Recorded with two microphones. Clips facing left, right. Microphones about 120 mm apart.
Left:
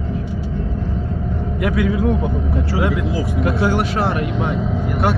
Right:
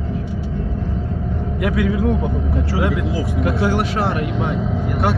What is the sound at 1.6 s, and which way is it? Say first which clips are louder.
Speech: even; centre (ahead or behind).